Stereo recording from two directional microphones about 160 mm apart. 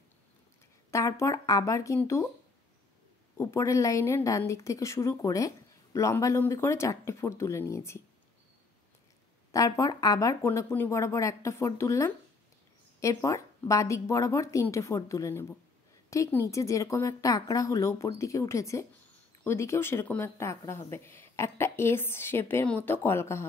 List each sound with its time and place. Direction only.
0.9 s a woman's voice: 20° left (ahead or behind)
3.3 s a woman's voice: 20° left (ahead or behind)
9.8 s a woman's voice: 20° left (ahead or behind)